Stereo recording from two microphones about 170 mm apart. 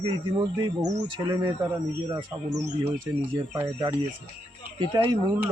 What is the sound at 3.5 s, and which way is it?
Speech, 15° right (ahead or behind).